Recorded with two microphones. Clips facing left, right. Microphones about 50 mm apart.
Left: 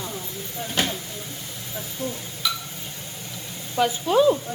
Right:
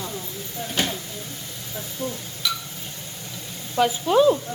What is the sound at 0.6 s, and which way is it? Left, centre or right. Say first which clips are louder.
Speech: even; centre.